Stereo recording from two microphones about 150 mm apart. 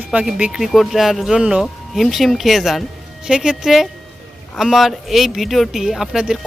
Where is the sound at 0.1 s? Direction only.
10° right (ahead or behind).